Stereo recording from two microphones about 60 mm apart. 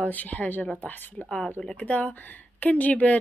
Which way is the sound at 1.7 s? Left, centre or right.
Left.